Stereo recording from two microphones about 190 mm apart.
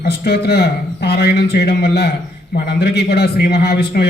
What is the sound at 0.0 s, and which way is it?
A man's voice, 55° left (ahead or behind).